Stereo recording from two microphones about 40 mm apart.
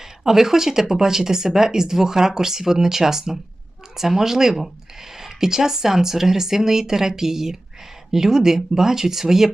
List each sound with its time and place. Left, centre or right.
0.0 s speech: centre